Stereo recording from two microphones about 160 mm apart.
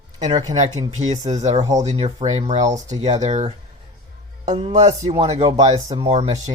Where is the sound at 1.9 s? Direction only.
45° right (ahead or behind).